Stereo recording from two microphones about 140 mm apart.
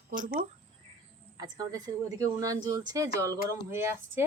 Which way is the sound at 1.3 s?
30° right (ahead or behind).